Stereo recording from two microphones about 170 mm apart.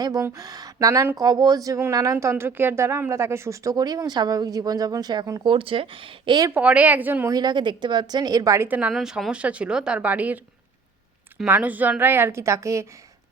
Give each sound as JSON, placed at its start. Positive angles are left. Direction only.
{"t": 0.0, "sound": "speech", "side_deg": -20}
{"t": 6.5, "sound": "speech", "side_deg": -10}
{"t": 7.3, "sound": "speech", "side_deg": -25}